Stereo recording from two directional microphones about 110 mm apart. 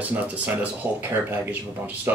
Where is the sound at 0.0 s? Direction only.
15° right (ahead or behind).